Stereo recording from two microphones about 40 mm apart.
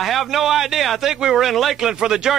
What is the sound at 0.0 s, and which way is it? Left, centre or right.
A man's voice, centre.